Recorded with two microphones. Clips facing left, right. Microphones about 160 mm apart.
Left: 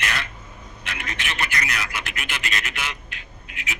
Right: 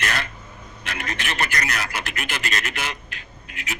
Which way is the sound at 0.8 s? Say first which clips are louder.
Right 2 dB; 40° right (ahead or behind).